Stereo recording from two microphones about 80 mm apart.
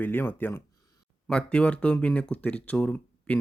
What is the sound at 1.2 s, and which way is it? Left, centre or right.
Speech, centre.